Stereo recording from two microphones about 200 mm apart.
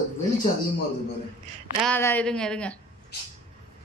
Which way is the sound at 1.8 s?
10° left (ahead or behind).